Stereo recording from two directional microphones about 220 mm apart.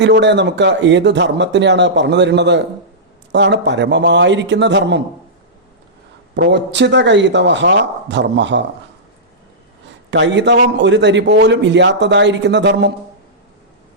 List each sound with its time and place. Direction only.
0.0 s a man's voice: 50° right (ahead or behind)
6.3 s a man's voice: 50° right (ahead or behind)
10.1 s a man's voice: 55° right (ahead or behind)